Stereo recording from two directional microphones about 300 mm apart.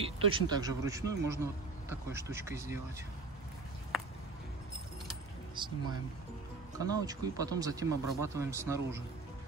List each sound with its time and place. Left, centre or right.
0.0 s speech: centre
5.6 s a sound: centre
6.8 s speech: centre